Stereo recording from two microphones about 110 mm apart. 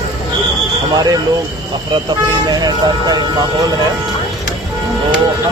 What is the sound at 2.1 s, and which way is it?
Speech, 40° right (ahead or behind).